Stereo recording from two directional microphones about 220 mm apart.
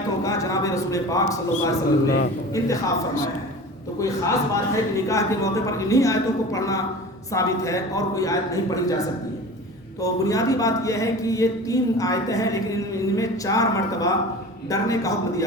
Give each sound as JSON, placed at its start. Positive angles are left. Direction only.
{"t": 0.2, "sound": "a sound", "side_deg": 15}
{"t": 2.0, "sound": "a man's voice", "side_deg": 45}
{"t": 2.6, "sound": "speech", "side_deg": 15}